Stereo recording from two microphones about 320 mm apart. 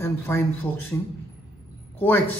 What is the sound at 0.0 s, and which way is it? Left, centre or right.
A man's voice, centre.